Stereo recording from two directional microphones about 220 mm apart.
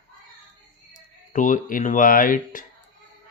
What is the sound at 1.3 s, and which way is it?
Speech, 35° left (ahead or behind).